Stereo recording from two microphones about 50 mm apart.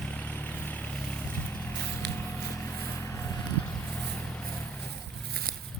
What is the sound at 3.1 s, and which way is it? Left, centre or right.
Vehicle, left.